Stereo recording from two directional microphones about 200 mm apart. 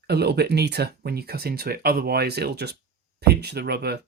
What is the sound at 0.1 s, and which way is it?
Speech, 55° right (ahead or behind).